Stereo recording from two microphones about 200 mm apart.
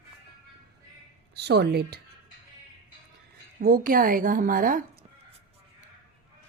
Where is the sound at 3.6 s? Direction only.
45° right (ahead or behind).